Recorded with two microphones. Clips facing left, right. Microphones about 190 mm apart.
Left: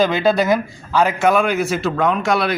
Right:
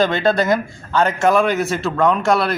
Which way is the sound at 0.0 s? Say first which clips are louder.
Left 1 dB; 5° left (ahead or behind).